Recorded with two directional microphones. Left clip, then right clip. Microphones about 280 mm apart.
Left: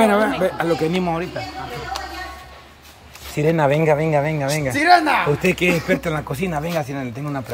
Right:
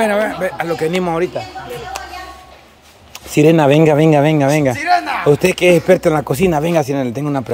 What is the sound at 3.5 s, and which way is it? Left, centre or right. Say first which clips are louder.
Speech: right 5 dB; right.